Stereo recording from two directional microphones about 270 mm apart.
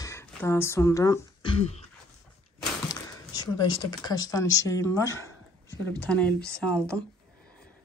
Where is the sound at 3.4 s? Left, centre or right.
Centre.